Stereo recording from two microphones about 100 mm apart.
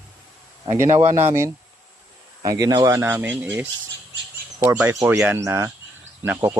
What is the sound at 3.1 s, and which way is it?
Speech, 20° right (ahead or behind).